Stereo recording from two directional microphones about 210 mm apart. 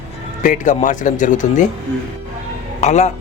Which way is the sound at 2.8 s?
30° left (ahead or behind).